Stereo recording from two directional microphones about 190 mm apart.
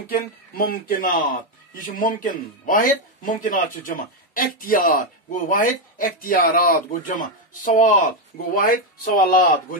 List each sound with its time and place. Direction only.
0.0 s speech: 50° left (ahead or behind)